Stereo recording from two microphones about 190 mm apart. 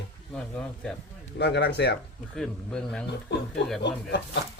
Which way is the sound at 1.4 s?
65° left (ahead or behind).